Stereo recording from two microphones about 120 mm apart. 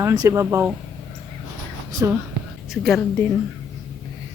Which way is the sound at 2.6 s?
Centre (ahead or behind).